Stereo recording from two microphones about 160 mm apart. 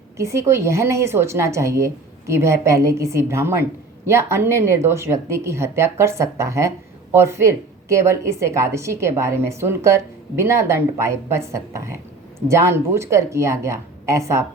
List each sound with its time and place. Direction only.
0.2 s a woman's voice: 20° right (ahead or behind)